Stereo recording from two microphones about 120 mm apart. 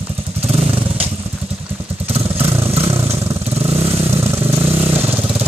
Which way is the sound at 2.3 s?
20° right (ahead or behind).